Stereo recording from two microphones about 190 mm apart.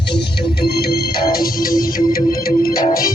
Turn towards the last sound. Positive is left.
turn(degrees=50)  # may be behind; listen again after turning